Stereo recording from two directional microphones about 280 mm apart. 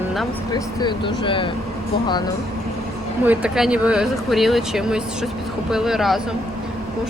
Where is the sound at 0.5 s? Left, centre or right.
Centre.